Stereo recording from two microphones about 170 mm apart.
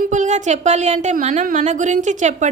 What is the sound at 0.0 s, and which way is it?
A woman's voice, 45° right (ahead or behind).